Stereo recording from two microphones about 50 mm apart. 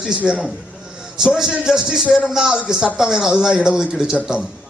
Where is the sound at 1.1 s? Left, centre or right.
Centre.